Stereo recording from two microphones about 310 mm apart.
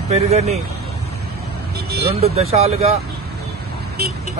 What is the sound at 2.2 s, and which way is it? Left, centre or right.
Speech, centre.